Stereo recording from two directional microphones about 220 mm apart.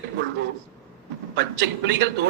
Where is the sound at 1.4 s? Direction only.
50° right (ahead or behind).